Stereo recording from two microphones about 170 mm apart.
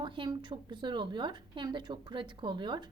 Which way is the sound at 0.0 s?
30° right (ahead or behind).